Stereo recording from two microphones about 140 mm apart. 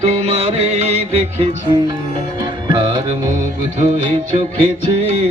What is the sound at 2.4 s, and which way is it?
Music, 30° right (ahead or behind).